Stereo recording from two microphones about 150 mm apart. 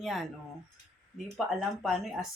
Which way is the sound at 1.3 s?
5° right (ahead or behind).